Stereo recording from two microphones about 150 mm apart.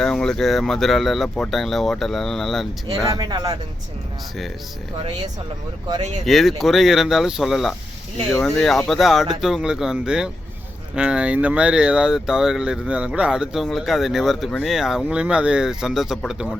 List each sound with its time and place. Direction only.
0.0 s speech: 5° left (ahead or behind)
3.2 s speech: 25° right (ahead or behind)
6.2 s speech: centre (ahead or behind)